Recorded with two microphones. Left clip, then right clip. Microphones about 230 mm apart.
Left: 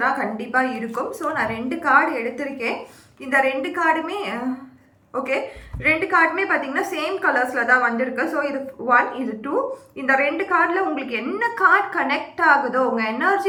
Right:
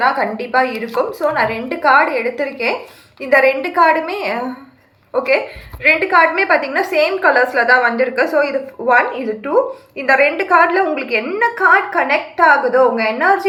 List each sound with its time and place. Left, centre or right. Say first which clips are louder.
0.0 s a woman's voice: right 6 dB; centre
5.8 s a woman's voice: right 6 dB; centre